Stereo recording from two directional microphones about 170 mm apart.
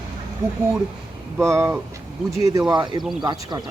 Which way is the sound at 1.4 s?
15° right (ahead or behind).